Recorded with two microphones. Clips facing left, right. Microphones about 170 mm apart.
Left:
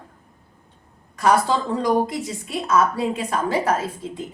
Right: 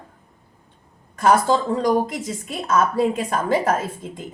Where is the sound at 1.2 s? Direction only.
45° right (ahead or behind).